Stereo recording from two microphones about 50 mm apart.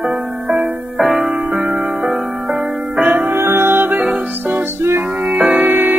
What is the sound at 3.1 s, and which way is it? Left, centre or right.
Music, right.